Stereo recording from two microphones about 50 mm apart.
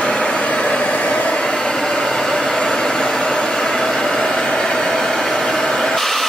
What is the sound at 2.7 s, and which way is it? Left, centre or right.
Vehicle, centre.